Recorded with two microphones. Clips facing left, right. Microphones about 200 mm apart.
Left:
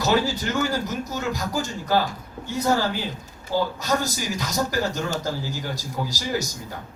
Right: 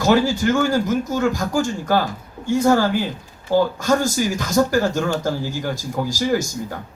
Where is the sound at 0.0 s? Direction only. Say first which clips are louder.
Right 6 dB; 50° right (ahead or behind).